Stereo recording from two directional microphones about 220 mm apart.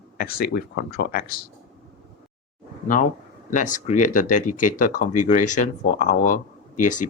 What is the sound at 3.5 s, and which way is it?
Speech, 35° left (ahead or behind).